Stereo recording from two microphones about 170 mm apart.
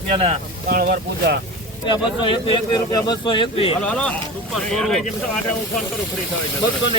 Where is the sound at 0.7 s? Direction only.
65° right (ahead or behind).